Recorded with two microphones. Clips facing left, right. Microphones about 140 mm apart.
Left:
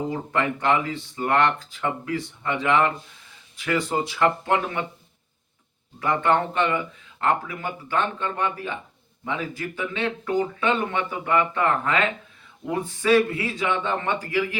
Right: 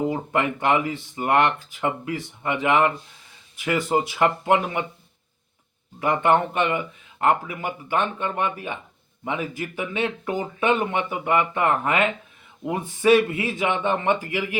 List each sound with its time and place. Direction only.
0.1 s speech: 15° right (ahead or behind)
3.8 s speech: 15° right (ahead or behind)
6.0 s speech: 15° right (ahead or behind)